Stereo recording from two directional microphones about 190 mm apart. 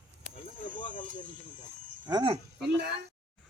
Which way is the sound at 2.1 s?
25° right (ahead or behind).